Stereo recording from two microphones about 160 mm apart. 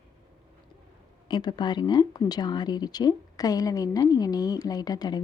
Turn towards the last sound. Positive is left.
turn(degrees=25)  # may be behind; listen again after turning